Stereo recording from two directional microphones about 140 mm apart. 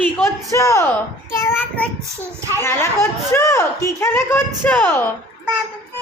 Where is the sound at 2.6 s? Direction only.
20° left (ahead or behind).